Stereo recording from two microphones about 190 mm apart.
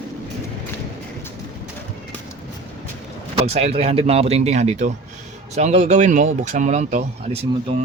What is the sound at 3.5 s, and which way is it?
Speech, 35° right (ahead or behind).